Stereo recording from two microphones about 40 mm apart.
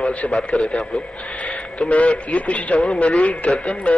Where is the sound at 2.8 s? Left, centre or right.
Centre.